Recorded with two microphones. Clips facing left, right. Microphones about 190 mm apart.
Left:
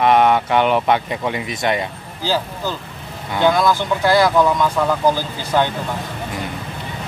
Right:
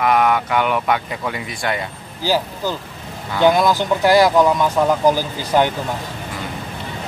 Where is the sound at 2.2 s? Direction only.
15° right (ahead or behind).